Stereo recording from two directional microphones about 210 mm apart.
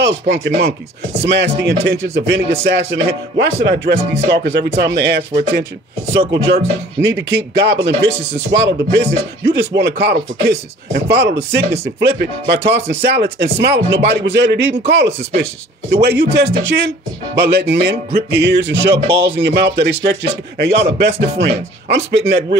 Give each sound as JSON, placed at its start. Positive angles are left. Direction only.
{"t": 0.0, "sound": "speech", "side_deg": -50}
{"t": 7.0, "sound": "speech", "side_deg": -60}